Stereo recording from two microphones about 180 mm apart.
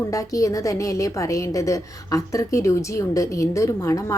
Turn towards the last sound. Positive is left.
turn(degrees=15)  # may be behind; listen again after turning